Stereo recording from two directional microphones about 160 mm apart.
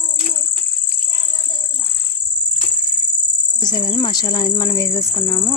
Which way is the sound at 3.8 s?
40° left (ahead or behind).